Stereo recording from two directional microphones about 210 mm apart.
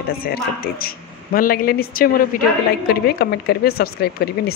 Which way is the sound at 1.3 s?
45° left (ahead or behind).